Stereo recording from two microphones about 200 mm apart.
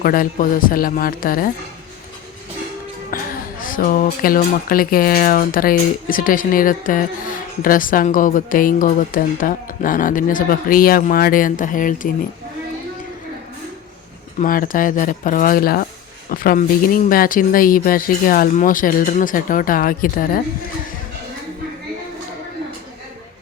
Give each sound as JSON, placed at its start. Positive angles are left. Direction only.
{"t": 0.0, "sound": "speech", "side_deg": 45}
{"t": 3.1, "sound": "music", "side_deg": 45}
{"t": 3.6, "sound": "speech", "side_deg": 45}
{"t": 14.3, "sound": "speech", "side_deg": 45}